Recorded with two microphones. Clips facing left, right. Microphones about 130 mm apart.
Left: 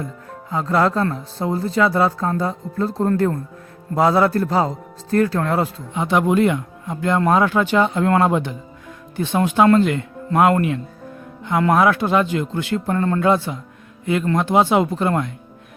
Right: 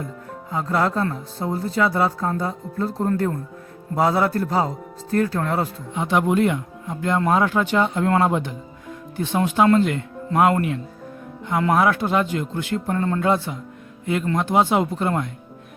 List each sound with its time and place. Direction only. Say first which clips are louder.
0.5 s speech: left 3 dB; 85° left
11.4 s speech: left 3 dB; 75° left (ahead or behind)